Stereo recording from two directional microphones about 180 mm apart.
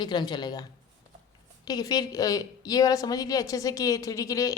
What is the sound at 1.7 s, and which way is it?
A woman's voice, 20° left (ahead or behind).